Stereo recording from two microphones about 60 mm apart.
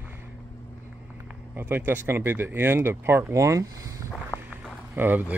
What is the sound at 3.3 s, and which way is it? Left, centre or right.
Speech, right.